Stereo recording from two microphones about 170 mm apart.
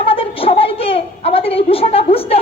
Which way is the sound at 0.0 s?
35° left (ahead or behind).